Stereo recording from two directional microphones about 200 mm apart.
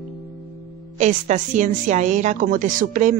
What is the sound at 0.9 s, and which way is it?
Speech, 35° right (ahead or behind).